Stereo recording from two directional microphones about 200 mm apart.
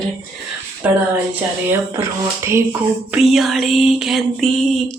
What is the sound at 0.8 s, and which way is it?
Speech, 5° right (ahead or behind).